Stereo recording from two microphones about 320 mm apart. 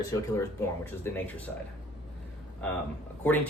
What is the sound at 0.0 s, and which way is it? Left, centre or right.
Speech, centre.